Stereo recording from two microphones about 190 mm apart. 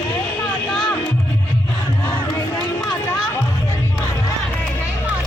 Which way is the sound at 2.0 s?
10° left (ahead or behind).